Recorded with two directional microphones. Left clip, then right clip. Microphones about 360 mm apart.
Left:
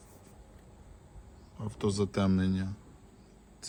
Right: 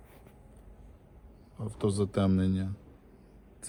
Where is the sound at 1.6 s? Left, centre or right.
Centre.